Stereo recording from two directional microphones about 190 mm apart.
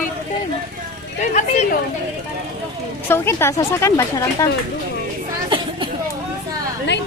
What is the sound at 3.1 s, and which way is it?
Speech, 10° left (ahead or behind).